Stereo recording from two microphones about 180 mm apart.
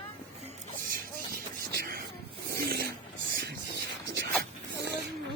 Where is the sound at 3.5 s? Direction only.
65° right (ahead or behind).